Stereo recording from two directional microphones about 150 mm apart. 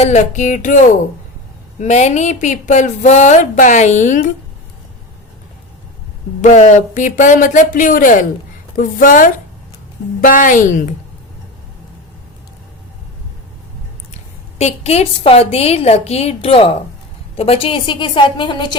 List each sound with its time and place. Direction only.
0.0 s speech: 50° left (ahead or behind)
6.4 s speech: 50° left (ahead or behind)
14.6 s a woman's voice: 45° left (ahead or behind)